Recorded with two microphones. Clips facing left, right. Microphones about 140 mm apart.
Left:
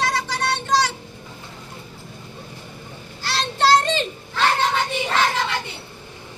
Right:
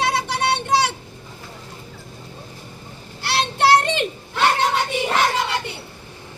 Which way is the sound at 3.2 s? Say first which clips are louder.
Right 2 dB; 65° right (ahead or behind).